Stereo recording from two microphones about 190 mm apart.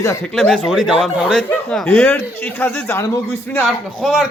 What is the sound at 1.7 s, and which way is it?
Speech, 5° left (ahead or behind).